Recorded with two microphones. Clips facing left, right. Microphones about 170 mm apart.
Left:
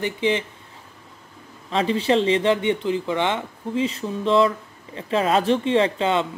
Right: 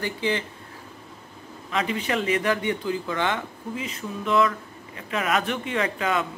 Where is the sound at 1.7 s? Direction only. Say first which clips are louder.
Left 6 dB; 30° left (ahead or behind).